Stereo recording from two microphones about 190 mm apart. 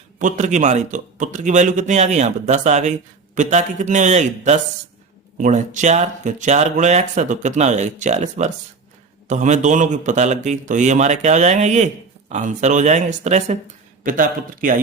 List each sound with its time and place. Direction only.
0.2 s a man's voice: 40° right (ahead or behind)